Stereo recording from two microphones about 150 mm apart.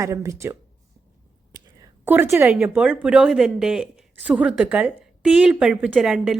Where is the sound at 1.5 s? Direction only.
25° right (ahead or behind).